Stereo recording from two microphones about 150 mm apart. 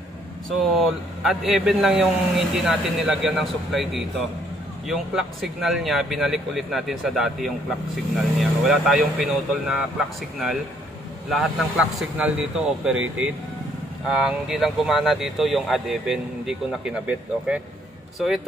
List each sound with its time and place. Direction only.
0.7 s speech: centre (ahead or behind)